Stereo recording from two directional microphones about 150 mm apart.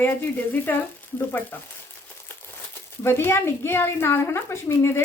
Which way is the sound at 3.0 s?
15° left (ahead or behind).